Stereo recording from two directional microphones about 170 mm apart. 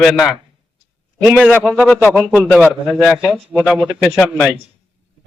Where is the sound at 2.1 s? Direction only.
10° right (ahead or behind).